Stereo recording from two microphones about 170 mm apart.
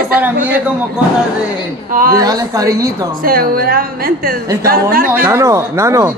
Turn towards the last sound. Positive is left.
turn(degrees=-20)  # may be behind; listen again after turning